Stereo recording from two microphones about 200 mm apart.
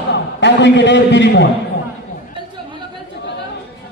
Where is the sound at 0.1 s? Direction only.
60° left (ahead or behind).